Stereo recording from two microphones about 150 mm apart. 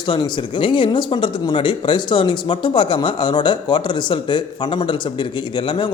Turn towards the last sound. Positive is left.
turn(degrees=35)  # may be behind; listen again after turning